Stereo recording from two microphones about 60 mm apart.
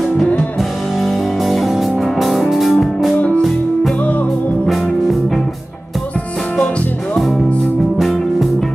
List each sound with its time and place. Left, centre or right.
1.0 s music: centre
8.0 s music: centre